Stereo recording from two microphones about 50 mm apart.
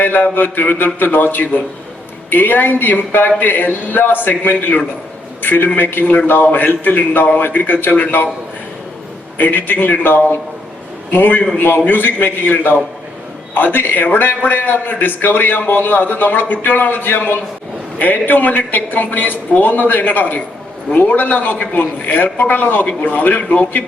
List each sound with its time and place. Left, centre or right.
0.0 s mantra: left
0.9 s a man's voice: left
9.4 s a man's voice: left